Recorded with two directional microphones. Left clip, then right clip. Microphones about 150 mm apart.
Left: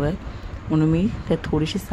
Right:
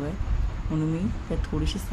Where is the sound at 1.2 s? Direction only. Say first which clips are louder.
Left 10 dB; 30° left (ahead or behind).